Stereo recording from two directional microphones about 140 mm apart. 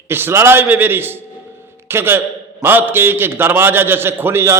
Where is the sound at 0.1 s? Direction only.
15° right (ahead or behind).